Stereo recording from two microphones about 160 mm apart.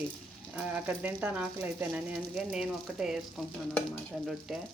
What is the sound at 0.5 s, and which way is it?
Speech, 10° right (ahead or behind).